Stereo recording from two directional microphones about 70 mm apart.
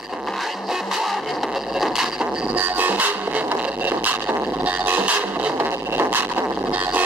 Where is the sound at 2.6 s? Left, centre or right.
Right.